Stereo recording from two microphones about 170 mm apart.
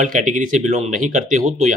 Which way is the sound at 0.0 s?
50° right (ahead or behind).